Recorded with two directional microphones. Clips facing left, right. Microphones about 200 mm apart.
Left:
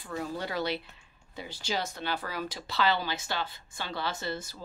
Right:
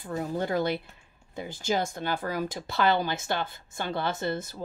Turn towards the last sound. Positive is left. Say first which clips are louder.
# right 5 dB
turn(degrees=-55)  # may be behind; listen again after turning